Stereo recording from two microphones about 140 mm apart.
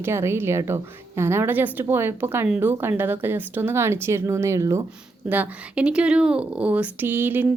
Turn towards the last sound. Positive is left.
turn(degrees=-15)  # may be behind; listen again after turning